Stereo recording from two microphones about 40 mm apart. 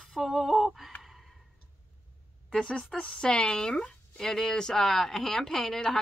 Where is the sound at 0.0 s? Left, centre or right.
Centre.